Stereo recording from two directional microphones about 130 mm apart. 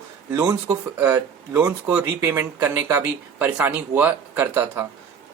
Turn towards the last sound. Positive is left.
turn(degrees=-15)  # may be behind; listen again after turning